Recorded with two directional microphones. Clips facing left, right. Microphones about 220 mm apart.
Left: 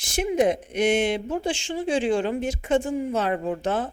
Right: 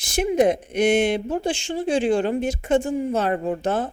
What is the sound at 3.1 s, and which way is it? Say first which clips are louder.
Speech: right 2 dB; 40° right (ahead or behind).